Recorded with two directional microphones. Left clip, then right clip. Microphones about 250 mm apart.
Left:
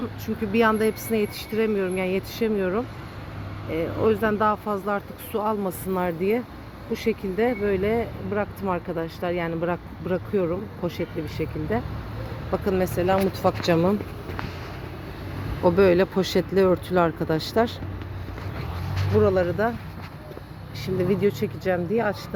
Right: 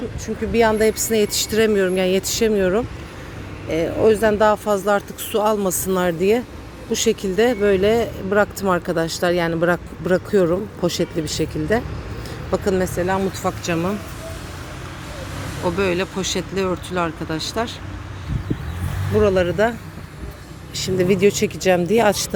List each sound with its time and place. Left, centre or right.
0.5 s speech: centre
12.5 s speech: centre
13.4 s speech: centre
15.6 s speech: centre
19.2 s speech: centre
20.7 s speech: centre